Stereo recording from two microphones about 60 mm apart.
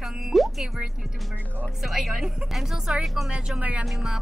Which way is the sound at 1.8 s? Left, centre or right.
Centre.